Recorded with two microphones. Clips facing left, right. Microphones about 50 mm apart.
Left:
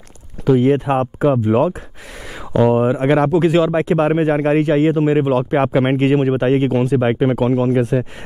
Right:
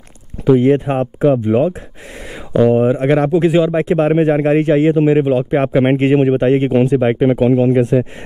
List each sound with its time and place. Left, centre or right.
0.5 s speech: centre
7.4 s speech: centre
7.7 s speech: centre